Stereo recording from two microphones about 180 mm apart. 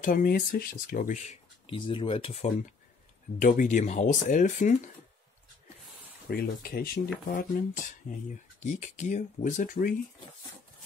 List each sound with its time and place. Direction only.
0.0 s speech: 50° left (ahead or behind)
1.2 s speech: 35° left (ahead or behind)
3.3 s speech: 45° left (ahead or behind)
6.2 s speech: 60° left (ahead or behind)